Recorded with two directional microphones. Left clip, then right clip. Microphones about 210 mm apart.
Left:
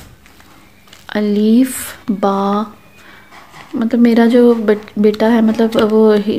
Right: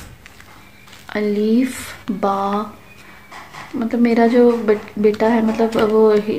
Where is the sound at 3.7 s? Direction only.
45° left (ahead or behind).